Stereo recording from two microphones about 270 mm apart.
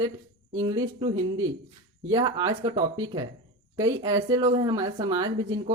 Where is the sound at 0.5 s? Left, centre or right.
Centre.